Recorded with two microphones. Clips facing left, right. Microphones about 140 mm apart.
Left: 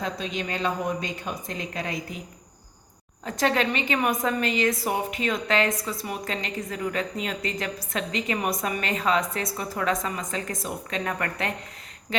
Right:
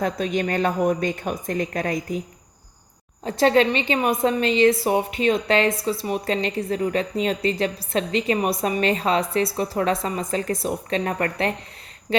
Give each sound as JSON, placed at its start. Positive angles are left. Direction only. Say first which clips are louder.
{"t": 0.0, "sound": "a woman's voice", "louder": "right 7 dB", "side_deg": -50}
{"t": 3.2, "sound": "a woman's voice", "louder": "right 6 dB", "side_deg": -30}